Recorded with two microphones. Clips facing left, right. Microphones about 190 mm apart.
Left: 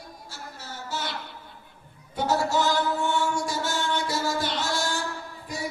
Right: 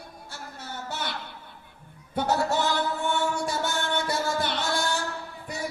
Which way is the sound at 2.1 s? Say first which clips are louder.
Left 1 dB; 60° right (ahead or behind).